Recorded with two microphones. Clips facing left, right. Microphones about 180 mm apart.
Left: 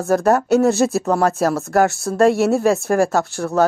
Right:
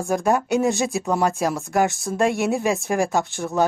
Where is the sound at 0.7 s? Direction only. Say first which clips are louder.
Left 5 dB; centre (ahead or behind).